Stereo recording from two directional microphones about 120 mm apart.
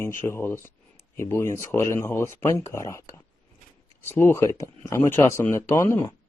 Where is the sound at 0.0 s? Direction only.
20° left (ahead or behind).